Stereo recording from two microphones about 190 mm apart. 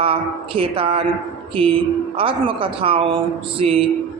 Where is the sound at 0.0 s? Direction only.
30° right (ahead or behind).